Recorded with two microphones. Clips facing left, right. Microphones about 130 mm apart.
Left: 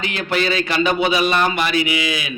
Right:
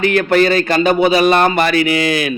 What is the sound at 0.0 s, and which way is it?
A man's voice, 55° right (ahead or behind).